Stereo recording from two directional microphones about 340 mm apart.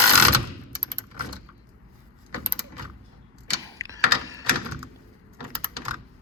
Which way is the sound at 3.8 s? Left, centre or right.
Centre.